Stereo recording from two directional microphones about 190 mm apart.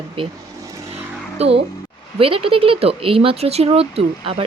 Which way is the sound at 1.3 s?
30° right (ahead or behind).